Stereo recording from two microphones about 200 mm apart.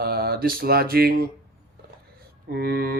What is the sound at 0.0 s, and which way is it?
Mantra, 50° right (ahead or behind).